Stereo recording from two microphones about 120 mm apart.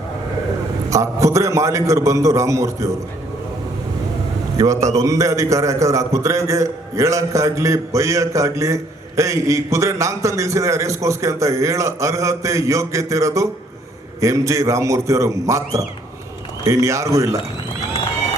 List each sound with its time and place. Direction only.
0.9 s a man's voice: 25° right (ahead or behind)
4.5 s a man's voice: 25° right (ahead or behind)